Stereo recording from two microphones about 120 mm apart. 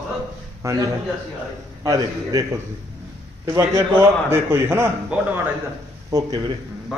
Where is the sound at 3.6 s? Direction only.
20° right (ahead or behind).